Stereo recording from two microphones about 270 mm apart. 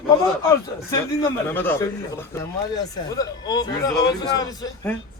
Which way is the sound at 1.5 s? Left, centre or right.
Centre.